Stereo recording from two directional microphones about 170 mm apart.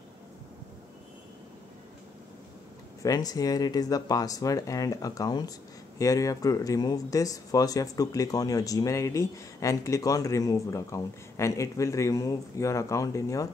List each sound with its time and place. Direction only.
3.0 s speech: 20° left (ahead or behind)